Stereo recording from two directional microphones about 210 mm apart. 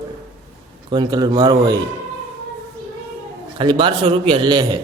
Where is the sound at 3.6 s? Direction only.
25° right (ahead or behind).